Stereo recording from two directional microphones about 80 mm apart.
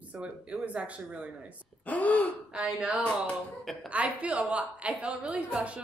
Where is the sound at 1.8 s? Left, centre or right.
Centre.